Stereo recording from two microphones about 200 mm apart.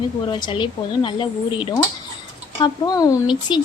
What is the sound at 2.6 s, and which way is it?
A woman's voice, 20° left (ahead or behind).